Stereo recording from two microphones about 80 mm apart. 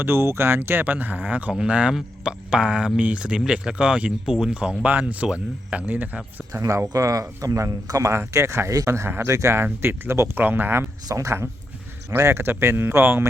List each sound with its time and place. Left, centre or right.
0.0 s speech: right
6.5 s speech: right